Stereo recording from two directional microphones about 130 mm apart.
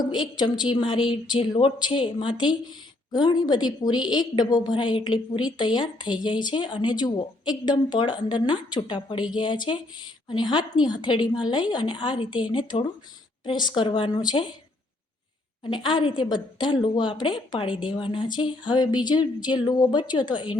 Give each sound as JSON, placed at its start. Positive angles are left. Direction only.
{"t": 0.0, "sound": "a woman's voice", "side_deg": 35}
{"t": 15.7, "sound": "a woman's voice", "side_deg": 40}